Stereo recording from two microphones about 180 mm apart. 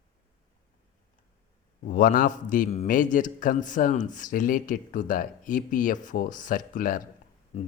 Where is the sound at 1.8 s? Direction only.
50° left (ahead or behind).